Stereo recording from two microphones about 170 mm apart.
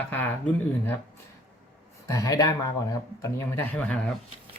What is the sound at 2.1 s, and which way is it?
Speech, 20° left (ahead or behind).